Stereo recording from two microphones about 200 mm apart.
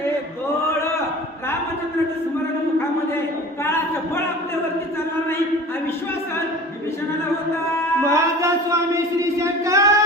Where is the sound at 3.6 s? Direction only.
10° left (ahead or behind).